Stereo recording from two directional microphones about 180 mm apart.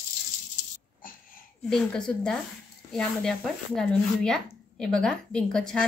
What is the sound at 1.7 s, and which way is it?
A woman's voice, 5° left (ahead or behind).